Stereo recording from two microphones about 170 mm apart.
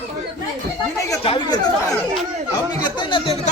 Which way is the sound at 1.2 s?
30° left (ahead or behind).